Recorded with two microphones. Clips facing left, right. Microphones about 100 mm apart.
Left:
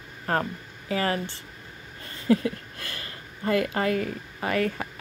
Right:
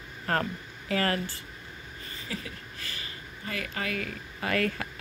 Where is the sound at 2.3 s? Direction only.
55° left (ahead or behind).